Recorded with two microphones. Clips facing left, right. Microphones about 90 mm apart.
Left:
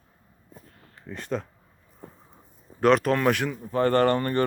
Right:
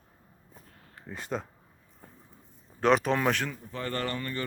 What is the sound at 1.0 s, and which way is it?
Speech, 5° right (ahead or behind).